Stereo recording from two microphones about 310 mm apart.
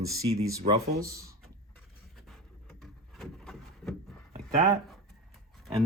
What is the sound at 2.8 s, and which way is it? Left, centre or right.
Drawer open or close, centre.